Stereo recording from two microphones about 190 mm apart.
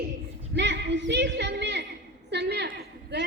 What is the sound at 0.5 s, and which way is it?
Speech, 65° right (ahead or behind).